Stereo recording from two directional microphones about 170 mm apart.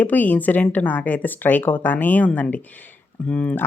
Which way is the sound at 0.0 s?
10° left (ahead or behind).